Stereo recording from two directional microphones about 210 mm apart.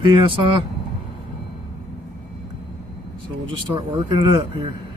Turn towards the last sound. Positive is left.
turn(degrees=-20)  # may be behind; listen again after turning